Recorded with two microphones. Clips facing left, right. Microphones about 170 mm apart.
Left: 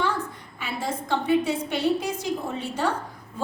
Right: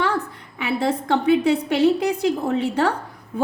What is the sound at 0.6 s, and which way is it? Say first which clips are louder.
A woman's voice: right 8 dB; 70° right (ahead or behind).